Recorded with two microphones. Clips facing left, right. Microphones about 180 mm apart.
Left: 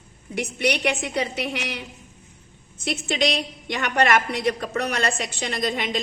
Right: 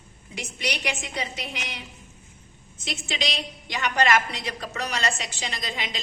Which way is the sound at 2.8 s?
60° left (ahead or behind).